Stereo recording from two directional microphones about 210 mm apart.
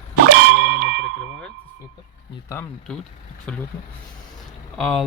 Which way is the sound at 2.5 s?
5° left (ahead or behind).